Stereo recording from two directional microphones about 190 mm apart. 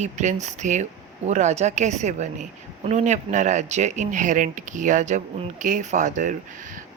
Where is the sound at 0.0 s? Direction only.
40° right (ahead or behind).